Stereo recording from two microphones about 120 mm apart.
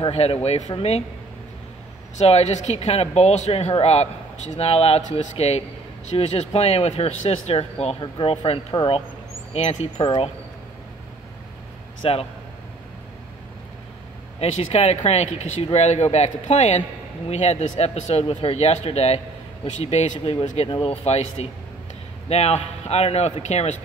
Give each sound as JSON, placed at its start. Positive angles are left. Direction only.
{"t": 0.1, "sound": "a man's voice", "side_deg": 55}
{"t": 2.1, "sound": "a man's voice", "side_deg": 65}
{"t": 8.0, "sound": "speech", "side_deg": 45}
{"t": 9.5, "sound": "a man's voice", "side_deg": 65}
{"t": 12.0, "sound": "speech", "side_deg": 55}
{"t": 14.4, "sound": "a man's voice", "side_deg": 60}
{"t": 18.3, "sound": "a man's voice", "side_deg": 55}
{"t": 20.6, "sound": "a man's voice", "side_deg": 50}